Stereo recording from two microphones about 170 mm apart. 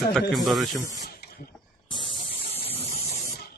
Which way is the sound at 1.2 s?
70° left (ahead or behind).